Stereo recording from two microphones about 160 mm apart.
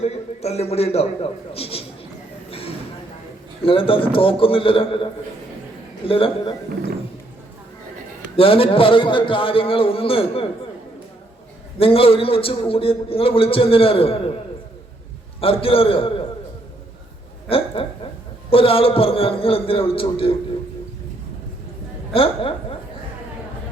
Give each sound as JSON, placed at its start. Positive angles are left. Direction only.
{"t": 0.4, "sound": "a man's voice", "side_deg": 40}
{"t": 2.5, "sound": "a sound", "side_deg": 35}
{"t": 3.6, "sound": "a man's voice", "side_deg": 35}
{"t": 6.1, "sound": "a man's voice", "side_deg": 35}
{"t": 8.4, "sound": "a man's voice", "side_deg": 35}
{"t": 11.8, "sound": "a man's voice", "side_deg": 35}
{"t": 15.4, "sound": "a man's voice", "side_deg": 35}
{"t": 17.5, "sound": "a man's voice", "side_deg": 35}
{"t": 22.1, "sound": "a man's voice", "side_deg": 35}